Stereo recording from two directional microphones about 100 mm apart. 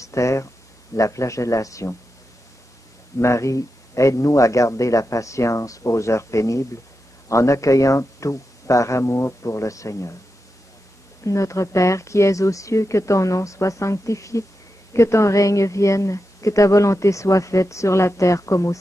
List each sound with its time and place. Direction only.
0.0 s a woman's voice: 30° left (ahead or behind)
3.2 s a woman's voice: 30° left (ahead or behind)
11.2 s a woman's voice: 30° left (ahead or behind)